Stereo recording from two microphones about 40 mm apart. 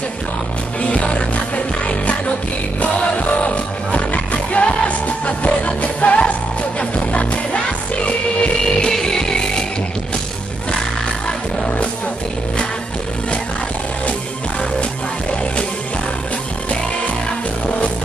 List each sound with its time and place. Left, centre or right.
0.8 s music: left
8.6 s music: centre